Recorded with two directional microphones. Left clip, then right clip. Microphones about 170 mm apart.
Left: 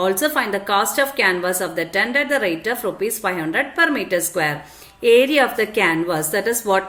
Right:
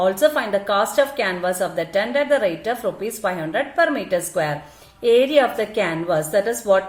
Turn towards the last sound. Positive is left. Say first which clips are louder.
# right 1 dB
turn(degrees=20)  # may be behind; listen again after turning